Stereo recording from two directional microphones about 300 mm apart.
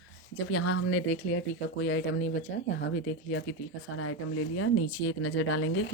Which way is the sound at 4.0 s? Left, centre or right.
Left.